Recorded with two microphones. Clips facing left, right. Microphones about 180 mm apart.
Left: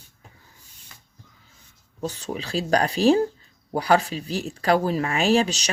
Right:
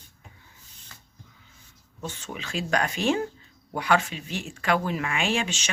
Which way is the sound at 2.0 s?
35° left (ahead or behind).